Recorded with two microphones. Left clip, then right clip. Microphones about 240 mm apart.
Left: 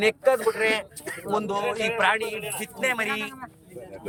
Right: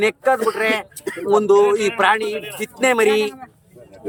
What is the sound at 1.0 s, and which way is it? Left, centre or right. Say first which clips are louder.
Speech: right 9 dB; right.